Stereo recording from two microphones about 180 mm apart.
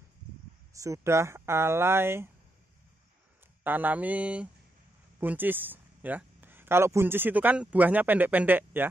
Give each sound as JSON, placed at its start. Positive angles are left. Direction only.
{"t": 0.7, "sound": "speech", "side_deg": -15}
{"t": 3.6, "sound": "speech", "side_deg": -10}